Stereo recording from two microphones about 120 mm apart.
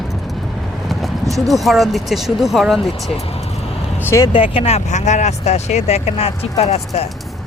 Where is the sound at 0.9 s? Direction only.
Centre (ahead or behind).